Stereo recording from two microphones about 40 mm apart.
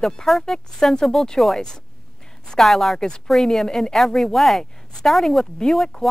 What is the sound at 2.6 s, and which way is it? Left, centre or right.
Speech, centre.